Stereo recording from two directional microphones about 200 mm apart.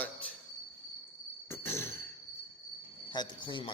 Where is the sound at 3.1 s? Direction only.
25° left (ahead or behind).